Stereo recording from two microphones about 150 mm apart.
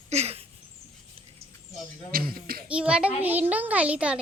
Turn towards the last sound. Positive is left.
turn(degrees=-5)  # may be behind; listen again after turning